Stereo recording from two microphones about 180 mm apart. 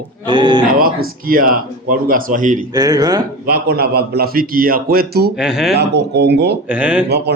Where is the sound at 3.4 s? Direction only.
60° right (ahead or behind).